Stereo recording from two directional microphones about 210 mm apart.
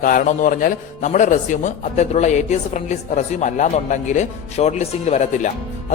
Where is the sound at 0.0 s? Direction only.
40° left (ahead or behind).